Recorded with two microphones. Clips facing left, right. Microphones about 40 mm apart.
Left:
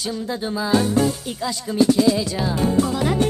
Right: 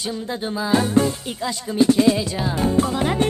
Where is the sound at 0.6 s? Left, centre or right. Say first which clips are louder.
Even; centre.